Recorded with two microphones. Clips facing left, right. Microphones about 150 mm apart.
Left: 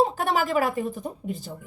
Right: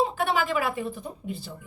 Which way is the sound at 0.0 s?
40° left (ahead or behind).